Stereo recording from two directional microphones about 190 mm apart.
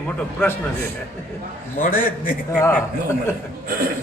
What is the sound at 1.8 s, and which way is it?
Speech, 45° left (ahead or behind).